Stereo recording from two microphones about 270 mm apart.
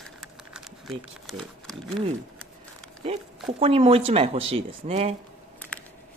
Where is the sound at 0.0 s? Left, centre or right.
Centre.